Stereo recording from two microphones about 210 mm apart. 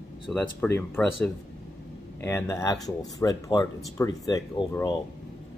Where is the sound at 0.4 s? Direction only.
10° left (ahead or behind).